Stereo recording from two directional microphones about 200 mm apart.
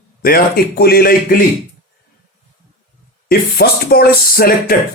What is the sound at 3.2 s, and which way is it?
Speech, 50° left (ahead or behind).